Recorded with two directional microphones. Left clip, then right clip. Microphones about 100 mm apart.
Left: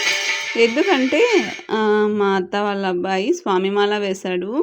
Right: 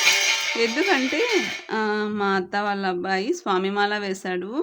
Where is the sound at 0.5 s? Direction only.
30° left (ahead or behind).